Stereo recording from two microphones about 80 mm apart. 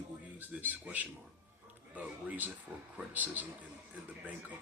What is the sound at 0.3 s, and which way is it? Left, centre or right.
Speech, right.